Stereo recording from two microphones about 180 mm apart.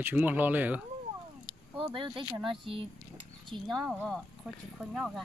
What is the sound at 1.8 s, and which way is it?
Speech, 25° right (ahead or behind).